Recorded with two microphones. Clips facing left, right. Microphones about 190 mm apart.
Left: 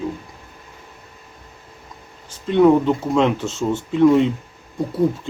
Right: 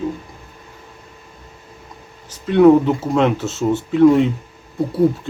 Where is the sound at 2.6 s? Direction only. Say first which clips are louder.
Right 3 dB; 5° right (ahead or behind).